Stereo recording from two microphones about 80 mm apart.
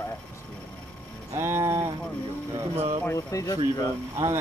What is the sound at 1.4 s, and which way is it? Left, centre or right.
Speech, right.